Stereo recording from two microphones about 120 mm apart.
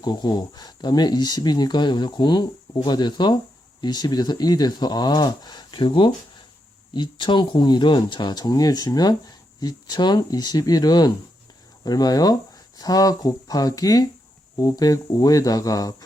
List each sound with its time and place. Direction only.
0.0 s speech: 40° left (ahead or behind)